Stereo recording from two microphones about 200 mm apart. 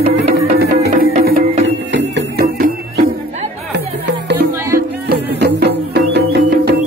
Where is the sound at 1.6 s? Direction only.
65° right (ahead or behind).